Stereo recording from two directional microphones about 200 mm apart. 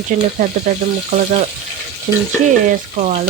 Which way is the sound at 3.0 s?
35° right (ahead or behind).